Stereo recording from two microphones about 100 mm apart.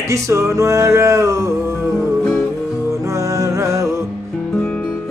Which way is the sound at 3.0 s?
35° right (ahead or behind).